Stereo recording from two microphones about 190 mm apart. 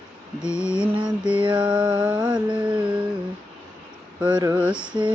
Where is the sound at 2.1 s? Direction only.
20° right (ahead or behind).